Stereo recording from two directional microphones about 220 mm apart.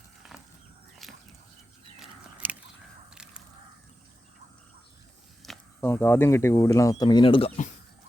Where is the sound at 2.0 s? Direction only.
5° right (ahead or behind).